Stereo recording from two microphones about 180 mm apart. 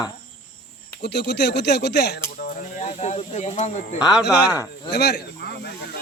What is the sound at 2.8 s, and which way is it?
Speech, 35° left (ahead or behind).